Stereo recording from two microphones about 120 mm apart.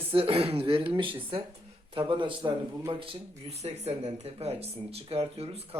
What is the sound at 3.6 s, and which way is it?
Speech, 65° right (ahead or behind).